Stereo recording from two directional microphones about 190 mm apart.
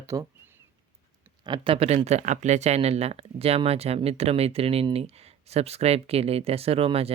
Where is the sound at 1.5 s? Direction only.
25° right (ahead or behind).